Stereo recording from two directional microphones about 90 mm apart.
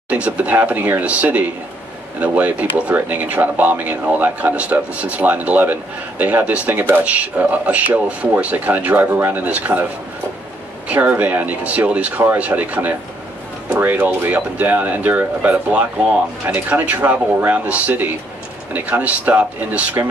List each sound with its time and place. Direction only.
0.1 s speech: 15° right (ahead or behind)
10.9 s speech: 15° right (ahead or behind)